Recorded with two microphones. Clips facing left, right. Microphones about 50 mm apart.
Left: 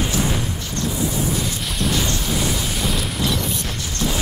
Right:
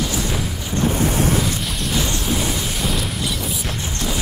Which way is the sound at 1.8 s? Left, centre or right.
Centre.